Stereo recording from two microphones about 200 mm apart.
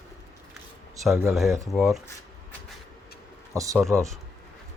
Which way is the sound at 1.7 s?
Centre (ahead or behind).